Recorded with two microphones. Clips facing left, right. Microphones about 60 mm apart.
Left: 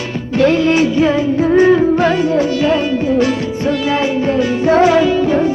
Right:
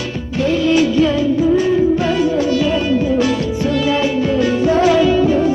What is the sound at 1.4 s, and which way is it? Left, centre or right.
Music, left.